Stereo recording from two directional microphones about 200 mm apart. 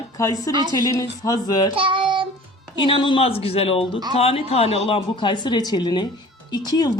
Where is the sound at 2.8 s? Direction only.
25° left (ahead or behind).